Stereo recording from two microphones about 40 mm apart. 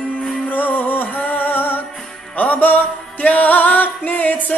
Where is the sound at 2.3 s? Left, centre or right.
Left.